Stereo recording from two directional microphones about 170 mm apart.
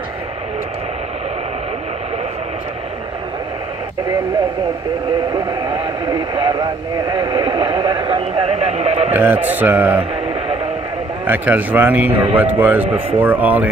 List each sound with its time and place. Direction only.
5.5 s speech: 25° right (ahead or behind)
9.1 s a man's voice: 10° right (ahead or behind)
11.2 s a man's voice: 10° right (ahead or behind)